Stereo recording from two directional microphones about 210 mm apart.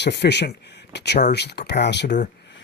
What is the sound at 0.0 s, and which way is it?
Speech, 55° left (ahead or behind).